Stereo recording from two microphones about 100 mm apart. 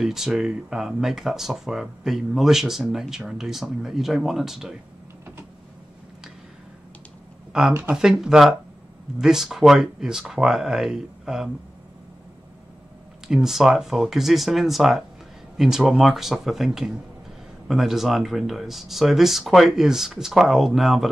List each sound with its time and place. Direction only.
0.0 s speech: 5° right (ahead or behind)
7.9 s speech: 5° right (ahead or behind)
13.3 s speech: 5° right (ahead or behind)